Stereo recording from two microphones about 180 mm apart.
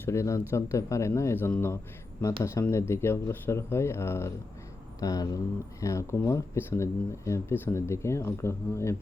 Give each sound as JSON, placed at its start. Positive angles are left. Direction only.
{"t": 0.0, "sound": "speech", "side_deg": 15}